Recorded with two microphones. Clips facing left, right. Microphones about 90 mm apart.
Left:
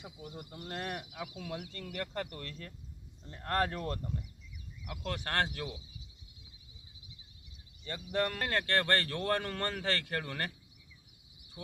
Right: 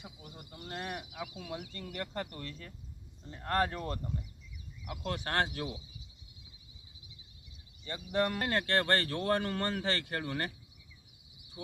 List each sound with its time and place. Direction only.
0.3 s speech: 5° right (ahead or behind); by 5.8 s 20° right (ahead or behind)
7.9 s speech: 15° right (ahead or behind)